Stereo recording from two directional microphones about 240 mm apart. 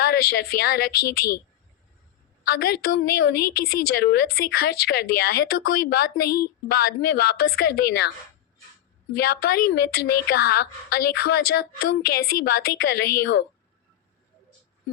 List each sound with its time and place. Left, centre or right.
0.1 s a woman's voice: left
1.0 s speech: left
2.5 s a woman's voice: left
3.4 s speech: left
4.0 s a woman's voice: left
9.1 s a woman's voice: left